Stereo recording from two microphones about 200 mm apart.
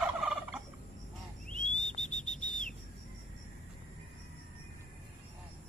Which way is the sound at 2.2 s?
40° left (ahead or behind).